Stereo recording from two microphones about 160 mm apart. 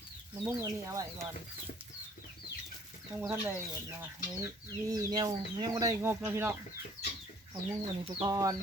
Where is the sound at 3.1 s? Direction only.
10° right (ahead or behind).